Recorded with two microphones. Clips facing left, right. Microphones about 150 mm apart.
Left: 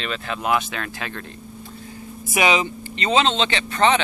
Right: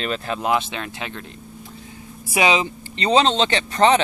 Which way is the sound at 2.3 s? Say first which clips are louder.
Right 1 dB; 30° right (ahead or behind).